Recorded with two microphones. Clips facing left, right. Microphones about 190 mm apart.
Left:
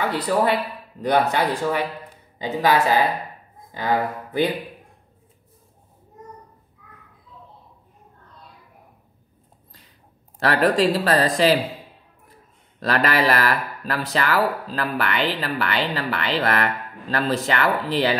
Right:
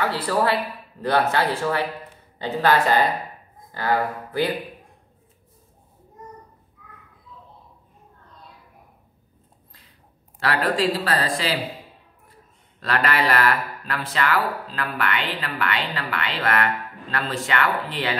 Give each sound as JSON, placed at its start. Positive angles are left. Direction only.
{"t": 0.0, "sound": "speech", "side_deg": 15}
{"t": 10.4, "sound": "speech", "side_deg": 40}
{"t": 12.8, "sound": "speech", "side_deg": 40}